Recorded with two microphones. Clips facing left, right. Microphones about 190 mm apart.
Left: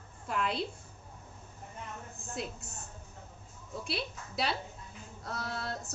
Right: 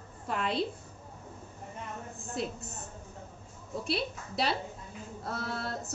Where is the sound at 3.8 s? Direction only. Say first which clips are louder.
Right 5 dB; centre (ahead or behind).